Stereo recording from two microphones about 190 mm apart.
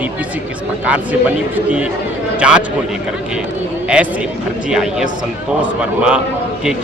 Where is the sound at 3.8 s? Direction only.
5° right (ahead or behind).